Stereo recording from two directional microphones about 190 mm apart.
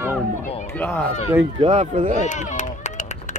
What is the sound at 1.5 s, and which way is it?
Speech, 35° right (ahead or behind).